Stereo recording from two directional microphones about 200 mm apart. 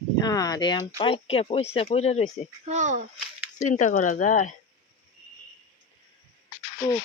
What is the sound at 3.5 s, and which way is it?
Speech, 35° left (ahead or behind).